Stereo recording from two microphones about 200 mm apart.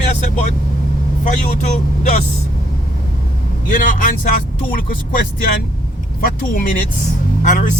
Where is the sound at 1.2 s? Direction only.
35° left (ahead or behind).